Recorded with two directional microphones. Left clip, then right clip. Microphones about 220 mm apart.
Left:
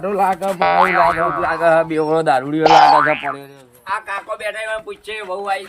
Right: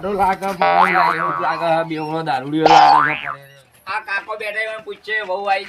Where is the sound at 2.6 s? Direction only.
Centre (ahead or behind).